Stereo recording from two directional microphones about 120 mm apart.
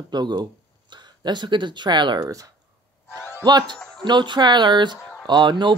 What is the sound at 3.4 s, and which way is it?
Speech, 35° right (ahead or behind).